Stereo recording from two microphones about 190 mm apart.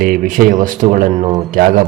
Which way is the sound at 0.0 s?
45° right (ahead or behind).